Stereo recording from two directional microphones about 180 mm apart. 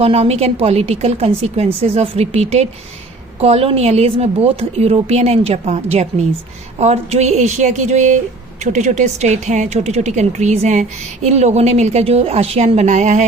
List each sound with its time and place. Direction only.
0.0 s speech: 35° right (ahead or behind)